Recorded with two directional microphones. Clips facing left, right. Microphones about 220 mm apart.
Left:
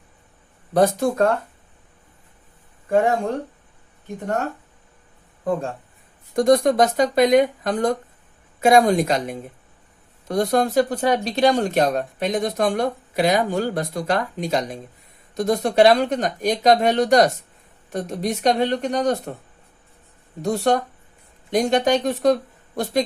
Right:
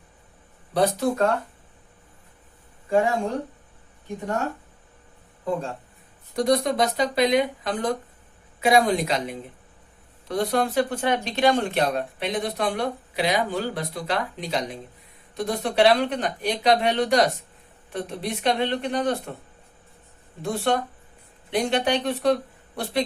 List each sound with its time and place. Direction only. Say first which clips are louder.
0.7 s speech: left 4 dB; 50° left (ahead or behind)
6.3 s speech: left 6 dB; 50° left (ahead or behind)
20.4 s speech: left 4 dB; 40° left (ahead or behind)